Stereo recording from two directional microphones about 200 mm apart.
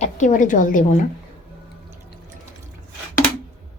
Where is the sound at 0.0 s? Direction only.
40° left (ahead or behind).